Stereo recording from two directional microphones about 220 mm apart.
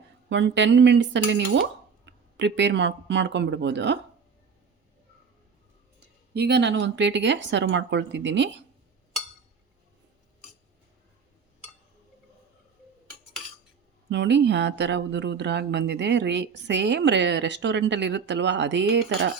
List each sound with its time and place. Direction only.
0.3 s speech: 55° right (ahead or behind)
6.3 s speech: 50° right (ahead or behind)
14.1 s speech: 50° right (ahead or behind)